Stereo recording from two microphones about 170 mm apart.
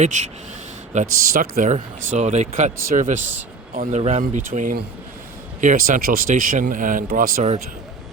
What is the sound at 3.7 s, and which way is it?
Speech, 40° right (ahead or behind).